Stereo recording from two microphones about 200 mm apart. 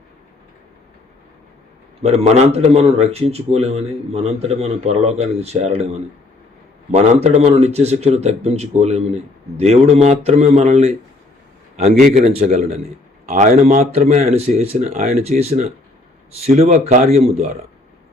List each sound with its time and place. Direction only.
2.0 s speech: 30° right (ahead or behind)
6.9 s speech: 35° right (ahead or behind)